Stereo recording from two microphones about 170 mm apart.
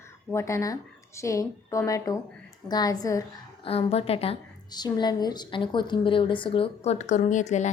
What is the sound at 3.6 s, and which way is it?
Speech, 35° left (ahead or behind).